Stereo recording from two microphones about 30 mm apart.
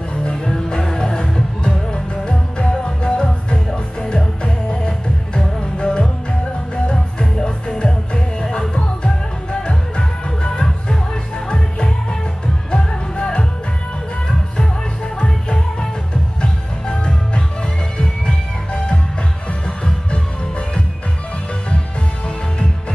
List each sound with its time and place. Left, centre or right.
0.1 s music: left
0.5 s music: centre
5.8 s music: left
12.7 s music: left
16.9 s music: left